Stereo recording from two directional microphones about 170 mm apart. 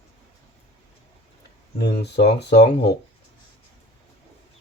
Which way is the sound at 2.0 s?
80° left.